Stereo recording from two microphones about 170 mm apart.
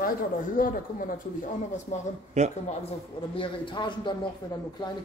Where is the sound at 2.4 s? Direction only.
45° right (ahead or behind).